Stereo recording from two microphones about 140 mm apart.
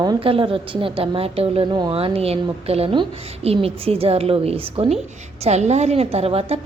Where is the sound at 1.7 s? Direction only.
30° right (ahead or behind).